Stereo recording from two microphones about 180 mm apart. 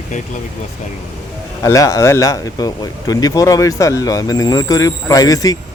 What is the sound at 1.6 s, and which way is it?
Speech, 20° left (ahead or behind).